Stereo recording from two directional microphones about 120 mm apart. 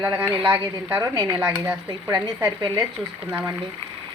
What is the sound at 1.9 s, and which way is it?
Speech, 35° right (ahead or behind).